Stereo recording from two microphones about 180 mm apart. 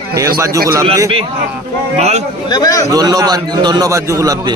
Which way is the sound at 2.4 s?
20° left (ahead or behind).